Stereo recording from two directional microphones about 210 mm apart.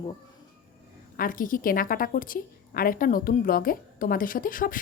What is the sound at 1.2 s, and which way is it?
A woman's voice, 40° left (ahead or behind).